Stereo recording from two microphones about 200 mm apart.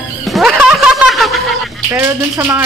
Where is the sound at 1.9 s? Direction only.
10° right (ahead or behind).